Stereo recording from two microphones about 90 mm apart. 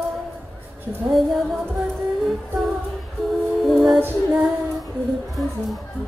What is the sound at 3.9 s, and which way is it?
Female singing, 25° right (ahead or behind).